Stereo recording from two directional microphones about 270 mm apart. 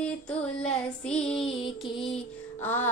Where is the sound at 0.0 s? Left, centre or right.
Centre.